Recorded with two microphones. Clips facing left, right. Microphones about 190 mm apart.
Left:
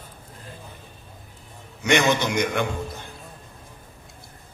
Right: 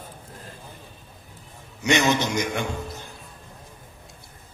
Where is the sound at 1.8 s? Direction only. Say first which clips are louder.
Left 1 dB; 55° left (ahead or behind).